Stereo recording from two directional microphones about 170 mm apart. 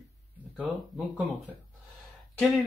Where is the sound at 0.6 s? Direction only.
5° right (ahead or behind).